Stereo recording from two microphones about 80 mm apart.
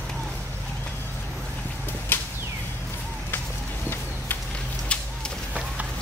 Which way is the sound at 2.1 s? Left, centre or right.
Left.